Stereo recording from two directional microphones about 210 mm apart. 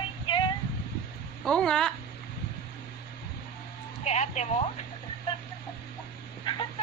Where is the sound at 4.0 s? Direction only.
30° left (ahead or behind).